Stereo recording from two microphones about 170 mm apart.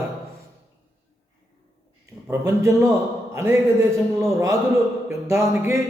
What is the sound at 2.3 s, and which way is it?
A man's voice, 20° right (ahead or behind).